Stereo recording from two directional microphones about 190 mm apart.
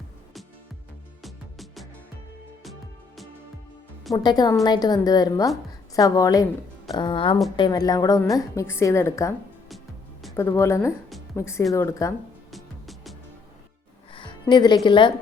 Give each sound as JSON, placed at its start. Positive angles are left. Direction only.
{"t": 1.2, "sound": "music", "side_deg": 0}
{"t": 4.1, "sound": "a woman's voice", "side_deg": 20}
{"t": 9.6, "sound": "music", "side_deg": 0}
{"t": 10.3, "sound": "a woman's voice", "side_deg": 15}
{"t": 12.5, "sound": "music", "side_deg": 0}
{"t": 14.1, "sound": "music", "side_deg": 25}
{"t": 14.8, "sound": "a woman's voice", "side_deg": 25}